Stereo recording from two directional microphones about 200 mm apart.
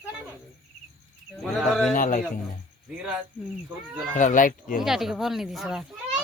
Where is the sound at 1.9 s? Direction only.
40° left (ahead or behind).